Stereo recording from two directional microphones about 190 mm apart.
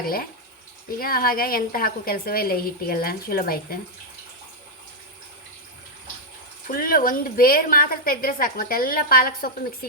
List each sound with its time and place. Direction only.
0.9 s a woman's voice: 50° left (ahead or behind)
6.7 s a woman's voice: 50° left (ahead or behind)